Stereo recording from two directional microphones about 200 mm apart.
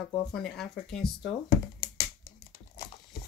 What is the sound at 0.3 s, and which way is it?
Speech, 5° left (ahead or behind).